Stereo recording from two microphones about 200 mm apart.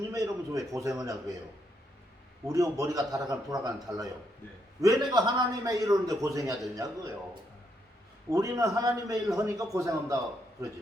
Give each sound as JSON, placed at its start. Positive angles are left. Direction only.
{"t": 0.1, "sound": "a man's voice", "side_deg": -15}
{"t": 2.5, "sound": "a man's voice", "side_deg": -15}
{"t": 8.3, "sound": "a man's voice", "side_deg": -15}